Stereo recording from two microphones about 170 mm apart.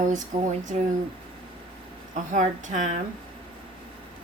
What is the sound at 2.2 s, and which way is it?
Speech, 50° right (ahead or behind).